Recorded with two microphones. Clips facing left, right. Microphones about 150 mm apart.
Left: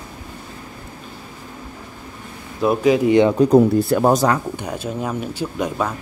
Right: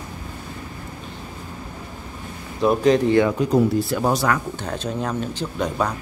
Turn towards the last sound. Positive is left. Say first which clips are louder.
# left 1 dB
turn(degrees=5)  # may be behind; listen again after turning